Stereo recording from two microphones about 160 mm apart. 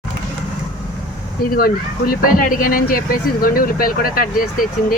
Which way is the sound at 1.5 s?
65° left (ahead or behind).